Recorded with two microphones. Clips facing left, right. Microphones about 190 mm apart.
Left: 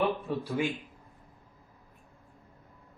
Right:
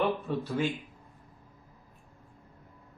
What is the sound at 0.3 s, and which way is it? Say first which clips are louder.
Speech: even; 10° left (ahead or behind).